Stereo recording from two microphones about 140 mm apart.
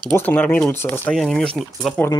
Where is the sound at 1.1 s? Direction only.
Centre (ahead or behind).